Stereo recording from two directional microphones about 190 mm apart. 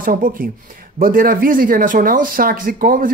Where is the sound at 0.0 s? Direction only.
50° right (ahead or behind).